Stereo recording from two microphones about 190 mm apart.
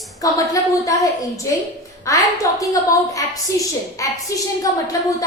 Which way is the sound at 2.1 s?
15° left (ahead or behind).